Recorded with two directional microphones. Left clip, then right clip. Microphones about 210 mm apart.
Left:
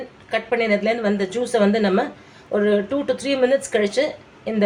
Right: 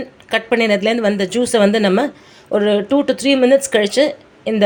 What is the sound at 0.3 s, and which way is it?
A woman's voice, 45° right (ahead or behind).